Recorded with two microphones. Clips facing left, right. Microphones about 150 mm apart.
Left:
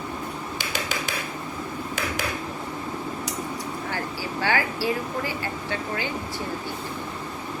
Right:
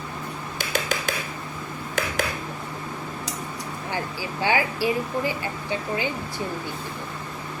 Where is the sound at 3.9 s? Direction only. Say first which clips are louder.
Right 3 dB; 15° right (ahead or behind).